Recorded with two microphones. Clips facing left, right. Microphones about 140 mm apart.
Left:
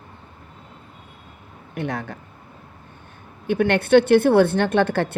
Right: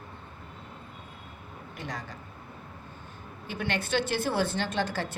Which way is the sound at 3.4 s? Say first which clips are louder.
Left 13 dB; 60° left (ahead or behind).